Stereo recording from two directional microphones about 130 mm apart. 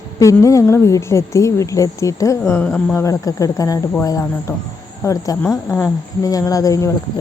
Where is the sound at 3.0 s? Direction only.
25° left (ahead or behind).